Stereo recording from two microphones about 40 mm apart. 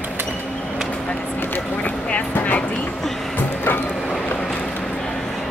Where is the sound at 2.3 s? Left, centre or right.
Left.